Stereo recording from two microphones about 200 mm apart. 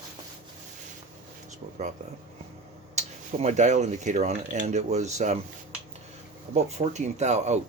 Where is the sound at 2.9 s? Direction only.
35° right (ahead or behind).